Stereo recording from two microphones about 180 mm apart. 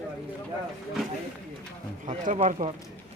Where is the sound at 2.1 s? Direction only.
45° right (ahead or behind).